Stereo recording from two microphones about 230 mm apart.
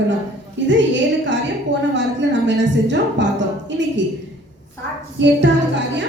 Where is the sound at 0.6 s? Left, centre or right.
Right.